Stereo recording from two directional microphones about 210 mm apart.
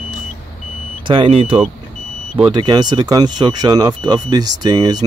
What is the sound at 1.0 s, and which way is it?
Speech, 25° right (ahead or behind).